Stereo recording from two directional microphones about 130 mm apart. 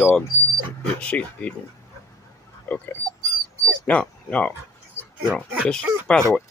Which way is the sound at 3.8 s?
10° left (ahead or behind).